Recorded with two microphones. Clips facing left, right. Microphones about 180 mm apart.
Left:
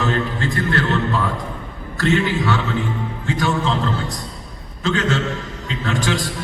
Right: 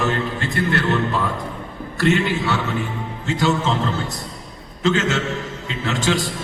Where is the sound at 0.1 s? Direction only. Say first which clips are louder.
Left 2 dB; 20° right (ahead or behind).